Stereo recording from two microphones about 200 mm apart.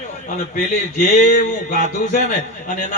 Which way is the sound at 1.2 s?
40° left (ahead or behind).